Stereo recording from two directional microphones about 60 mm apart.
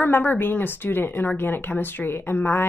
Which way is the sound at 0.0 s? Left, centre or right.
Left.